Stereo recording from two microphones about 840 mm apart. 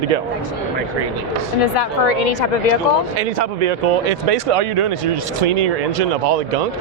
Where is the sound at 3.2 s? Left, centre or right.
Right.